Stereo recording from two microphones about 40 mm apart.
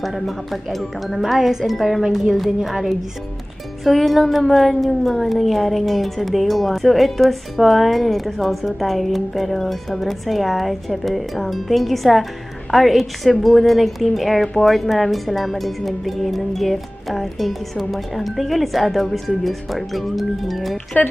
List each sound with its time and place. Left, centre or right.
0.0 s speech: centre
20.9 s speech: left